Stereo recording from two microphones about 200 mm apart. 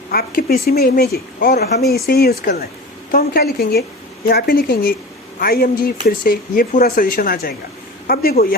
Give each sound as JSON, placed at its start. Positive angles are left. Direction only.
{"t": 0.1, "sound": "speech", "side_deg": 50}